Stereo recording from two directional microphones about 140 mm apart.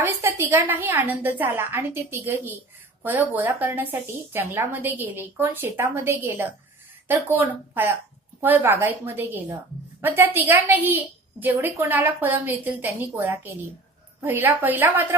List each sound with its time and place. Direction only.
0.0 s speech: 15° right (ahead or behind)